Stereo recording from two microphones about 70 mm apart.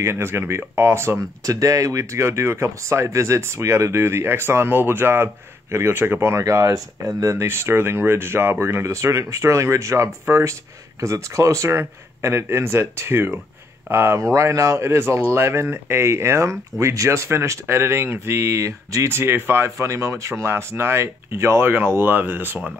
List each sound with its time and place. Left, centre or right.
0.0 s speech: right
1.4 s speech: right
6.4 s speech: right